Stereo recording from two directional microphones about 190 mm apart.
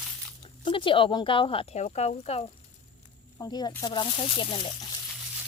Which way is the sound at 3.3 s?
20° left (ahead or behind).